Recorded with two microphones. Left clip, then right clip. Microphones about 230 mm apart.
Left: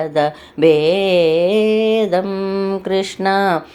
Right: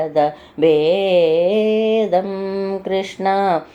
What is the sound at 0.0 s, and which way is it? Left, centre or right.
Mantra, left.